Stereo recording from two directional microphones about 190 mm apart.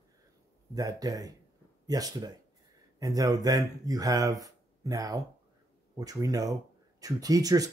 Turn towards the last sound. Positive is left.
turn(degrees=-20)  # may be behind; listen again after turning